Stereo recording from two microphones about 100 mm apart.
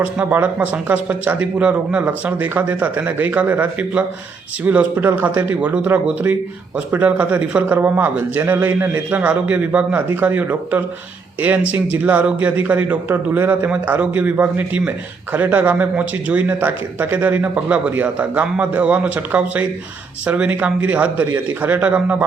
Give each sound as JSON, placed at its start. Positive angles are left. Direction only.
{"t": 0.0, "sound": "a man's voice", "side_deg": -15}